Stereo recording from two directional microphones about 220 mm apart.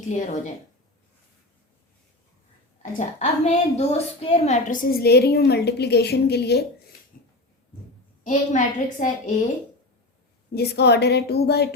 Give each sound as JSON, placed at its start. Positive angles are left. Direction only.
{"t": 2.8, "sound": "a woman's voice", "side_deg": 30}
{"t": 8.2, "sound": "a woman's voice", "side_deg": 35}
{"t": 10.5, "sound": "a woman's voice", "side_deg": 50}